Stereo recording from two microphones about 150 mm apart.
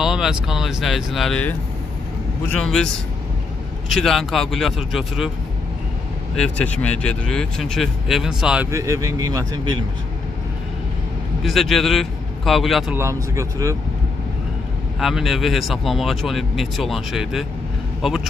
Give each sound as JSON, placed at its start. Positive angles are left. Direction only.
{"t": 0.0, "sound": "speech", "side_deg": -5}
{"t": 3.9, "sound": "speech", "side_deg": 0}
{"t": 6.3, "sound": "speech", "side_deg": 5}
{"t": 8.6, "sound": "speech", "side_deg": -20}
{"t": 11.4, "sound": "speech", "side_deg": 0}
{"t": 12.9, "sound": "speech", "side_deg": -20}
{"t": 15.0, "sound": "speech", "side_deg": 0}